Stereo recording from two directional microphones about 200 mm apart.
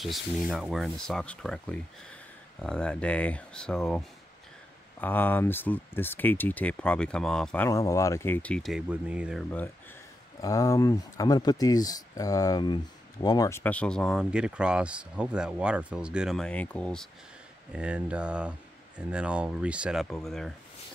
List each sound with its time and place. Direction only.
0.0 s speech: centre (ahead or behind)
5.0 s speech: 10° left (ahead or behind); by 9.4 s 5° right (ahead or behind)
10.4 s speech: 15° left (ahead or behind)